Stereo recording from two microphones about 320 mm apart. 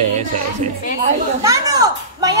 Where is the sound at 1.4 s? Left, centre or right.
Centre.